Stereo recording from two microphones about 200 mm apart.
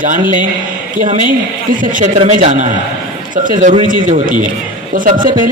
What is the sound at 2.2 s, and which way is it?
Speech, 30° right (ahead or behind).